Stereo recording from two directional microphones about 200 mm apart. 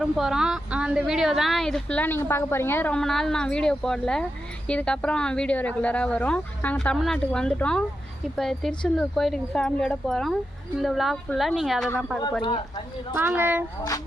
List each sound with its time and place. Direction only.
0.0 s a woman's voice: centre (ahead or behind)
12.4 s speech: 25° left (ahead or behind)
13.1 s speech: 10° right (ahead or behind)